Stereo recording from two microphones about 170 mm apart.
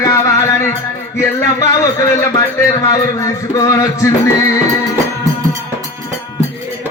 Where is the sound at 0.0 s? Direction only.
20° left (ahead or behind).